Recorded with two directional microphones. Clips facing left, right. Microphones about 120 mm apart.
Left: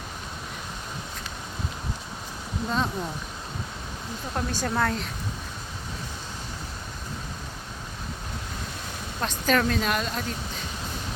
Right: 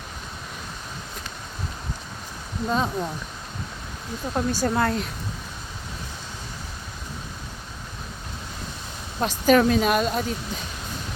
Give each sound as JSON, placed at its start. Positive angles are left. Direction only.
{"t": 2.6, "sound": "speech", "side_deg": -10}
{"t": 4.4, "sound": "speech", "side_deg": -5}
{"t": 9.2, "sound": "speech", "side_deg": -10}